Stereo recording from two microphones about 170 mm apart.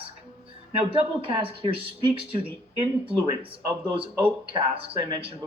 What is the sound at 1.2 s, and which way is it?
Speech, 30° right (ahead or behind).